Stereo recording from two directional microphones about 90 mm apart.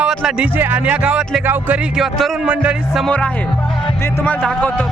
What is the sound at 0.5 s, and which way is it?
Speech, 20° right (ahead or behind).